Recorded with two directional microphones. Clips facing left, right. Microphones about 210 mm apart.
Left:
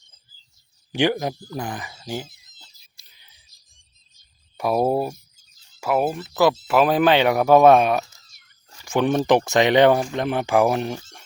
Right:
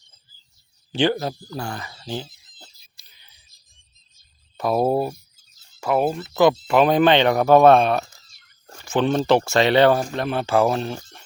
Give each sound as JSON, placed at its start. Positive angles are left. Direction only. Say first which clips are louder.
{"t": 0.9, "sound": "speech", "louder": "even", "side_deg": 15}
{"t": 3.0, "sound": "whispering", "louder": "right 1 dB", "side_deg": 10}
{"t": 4.5, "sound": "speech", "louder": "even", "side_deg": 10}